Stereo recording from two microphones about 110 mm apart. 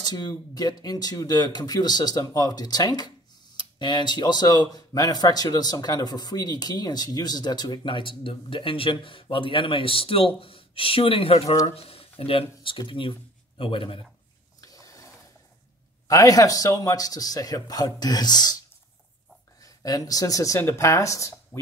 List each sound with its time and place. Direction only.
0.0 s speech: 40° left (ahead or behind); by 14.0 s 55° left (ahead or behind)
14.6 s a sound: 30° left (ahead or behind)
16.1 s speech: 30° left (ahead or behind)
19.6 s speech: 35° left (ahead or behind)